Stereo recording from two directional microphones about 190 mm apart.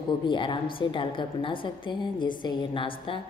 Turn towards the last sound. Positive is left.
turn(degrees=25)  # may be behind; listen again after turning